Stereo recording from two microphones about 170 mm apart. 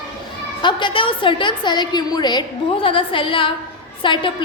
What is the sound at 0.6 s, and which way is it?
A woman's voice, 25° left (ahead or behind).